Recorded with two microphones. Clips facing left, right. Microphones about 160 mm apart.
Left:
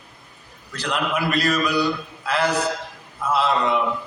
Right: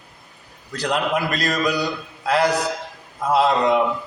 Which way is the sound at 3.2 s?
40° right (ahead or behind).